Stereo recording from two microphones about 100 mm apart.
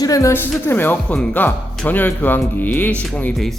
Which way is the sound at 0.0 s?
35° left (ahead or behind).